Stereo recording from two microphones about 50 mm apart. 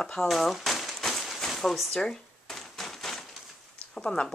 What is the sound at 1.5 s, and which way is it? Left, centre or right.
Speech, centre.